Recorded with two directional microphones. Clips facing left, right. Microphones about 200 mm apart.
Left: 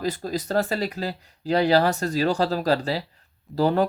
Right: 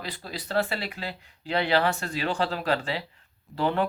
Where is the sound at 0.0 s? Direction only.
45° left (ahead or behind).